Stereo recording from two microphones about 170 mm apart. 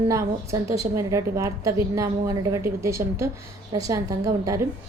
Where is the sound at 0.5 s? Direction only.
20° right (ahead or behind).